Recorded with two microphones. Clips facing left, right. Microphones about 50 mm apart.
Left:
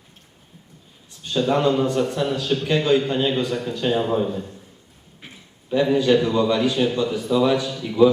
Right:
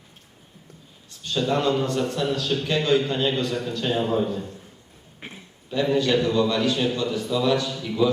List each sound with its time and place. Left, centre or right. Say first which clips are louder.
1.2 s a man's voice: left 3 dB; centre
5.2 s a sound: right 3 dB; right
5.7 s a man's voice: left 4 dB; centre